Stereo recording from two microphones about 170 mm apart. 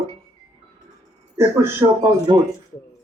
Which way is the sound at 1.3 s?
15° right (ahead or behind).